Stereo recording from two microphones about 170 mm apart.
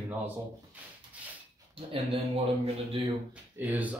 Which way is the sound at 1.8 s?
35° right (ahead or behind).